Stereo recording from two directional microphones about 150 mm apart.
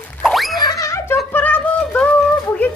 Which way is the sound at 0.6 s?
25° left (ahead or behind).